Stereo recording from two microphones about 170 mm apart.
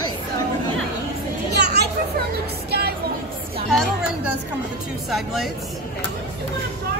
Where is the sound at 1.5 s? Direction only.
75° right (ahead or behind).